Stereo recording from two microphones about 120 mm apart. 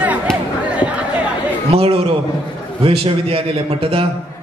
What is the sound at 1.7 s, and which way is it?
A man's voice, 55° right (ahead or behind).